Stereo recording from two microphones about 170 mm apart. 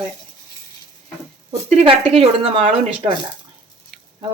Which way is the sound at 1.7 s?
40° right (ahead or behind).